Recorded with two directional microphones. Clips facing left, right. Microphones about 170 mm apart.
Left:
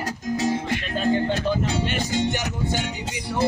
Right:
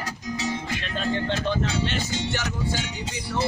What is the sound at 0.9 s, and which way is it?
Music, 10° left (ahead or behind).